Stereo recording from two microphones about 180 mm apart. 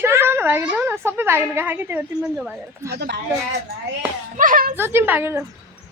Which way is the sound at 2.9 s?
65° right (ahead or behind).